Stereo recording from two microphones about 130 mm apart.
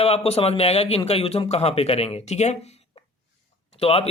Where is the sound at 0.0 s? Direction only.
50° left (ahead or behind).